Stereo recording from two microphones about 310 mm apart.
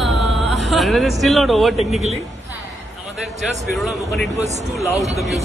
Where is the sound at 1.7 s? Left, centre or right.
Left.